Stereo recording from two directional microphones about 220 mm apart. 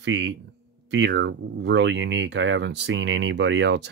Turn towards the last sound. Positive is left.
turn(degrees=-55)  # may be behind; listen again after turning